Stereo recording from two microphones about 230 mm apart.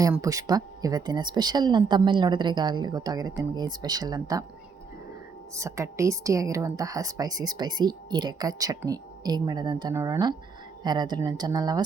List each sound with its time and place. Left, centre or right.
0.0 s speech: centre
5.5 s speech: centre